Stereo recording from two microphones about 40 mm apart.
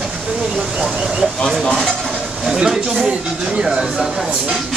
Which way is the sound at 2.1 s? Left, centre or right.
Centre.